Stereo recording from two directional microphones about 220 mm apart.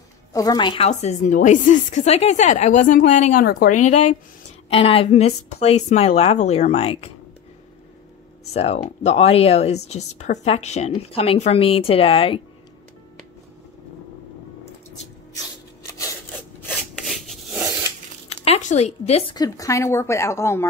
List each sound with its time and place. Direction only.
0.3 s a woman's voice: 15° left (ahead or behind); by 3.7 s 40° left (ahead or behind)
4.6 s a woman's voice: 25° left (ahead or behind)
8.5 s a woman's voice: 30° left (ahead or behind)
15.9 s a sound: 15° left (ahead or behind)
16.6 s rub: centre (ahead or behind)
18.3 s a woman's voice: 25° left (ahead or behind); by 20.6 s 10° left (ahead or behind)